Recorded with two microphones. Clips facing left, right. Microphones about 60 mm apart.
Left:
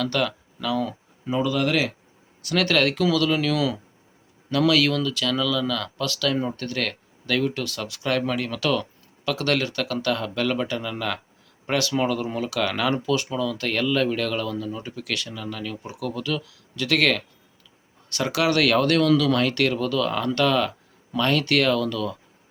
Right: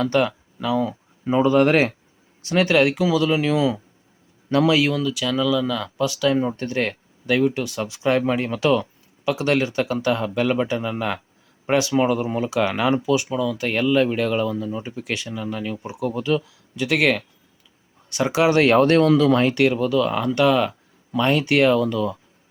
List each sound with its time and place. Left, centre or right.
0.0 s speech: right
1.3 s speech: right
2.4 s speech: right